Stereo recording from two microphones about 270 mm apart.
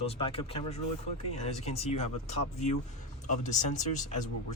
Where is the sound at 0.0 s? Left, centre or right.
Left.